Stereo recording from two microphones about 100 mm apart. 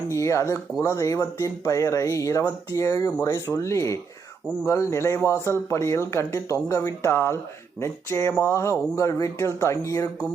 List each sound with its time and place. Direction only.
0.1 s a man's voice: 30° left (ahead or behind)